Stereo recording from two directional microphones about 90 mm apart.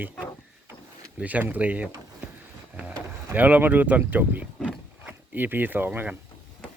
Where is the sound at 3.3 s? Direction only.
20° right (ahead or behind).